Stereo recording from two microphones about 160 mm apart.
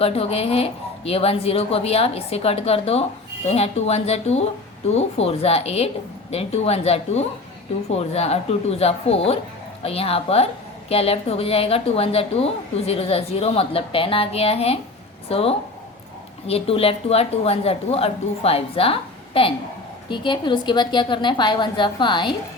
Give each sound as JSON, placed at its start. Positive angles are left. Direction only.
{"t": 0.0, "sound": "a woman's voice", "side_deg": 40}